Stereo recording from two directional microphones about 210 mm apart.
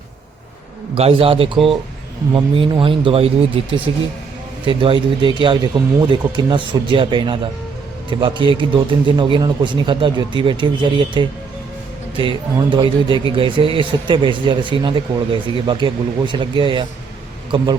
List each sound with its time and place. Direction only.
0.9 s speech: 25° right (ahead or behind)